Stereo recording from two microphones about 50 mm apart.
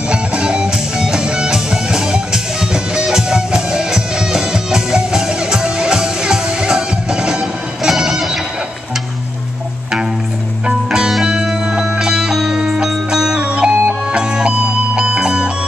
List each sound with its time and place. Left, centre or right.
0.1 s music: right
10.9 s music: centre
13.4 s music: right
14.2 s music: centre